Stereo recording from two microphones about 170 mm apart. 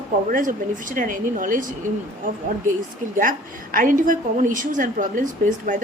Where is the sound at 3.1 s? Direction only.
55° right (ahead or behind).